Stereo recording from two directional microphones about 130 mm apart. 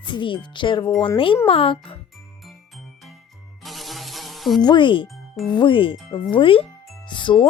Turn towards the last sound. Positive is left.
turn(degrees=40)  # may be behind; listen again after turning